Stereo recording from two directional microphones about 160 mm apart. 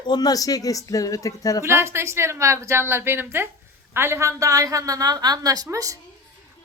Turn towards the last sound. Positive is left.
turn(degrees=-20)  # may be behind; listen again after turning